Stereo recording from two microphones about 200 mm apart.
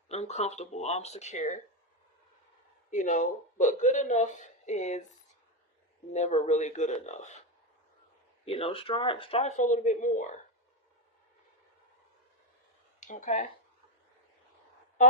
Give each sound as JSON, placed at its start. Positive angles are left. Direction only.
{"t": 0.1, "sound": "speech", "side_deg": 35}
{"t": 2.9, "sound": "speech", "side_deg": 40}
{"t": 6.1, "sound": "speech", "side_deg": 35}
{"t": 8.4, "sound": "speech", "side_deg": 30}
{"t": 13.0, "sound": "speech", "side_deg": 40}